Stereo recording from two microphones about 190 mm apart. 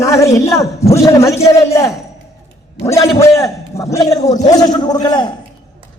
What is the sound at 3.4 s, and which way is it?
A man's voice, 15° left (ahead or behind).